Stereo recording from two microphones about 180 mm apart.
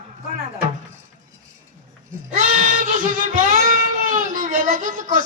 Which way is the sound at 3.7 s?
50° right (ahead or behind).